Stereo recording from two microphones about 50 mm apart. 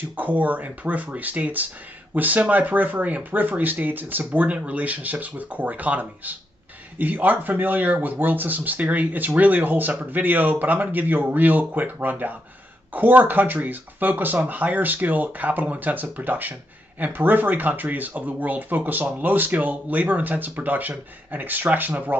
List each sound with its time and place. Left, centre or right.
0.1 s speech: right
4.5 s speech: right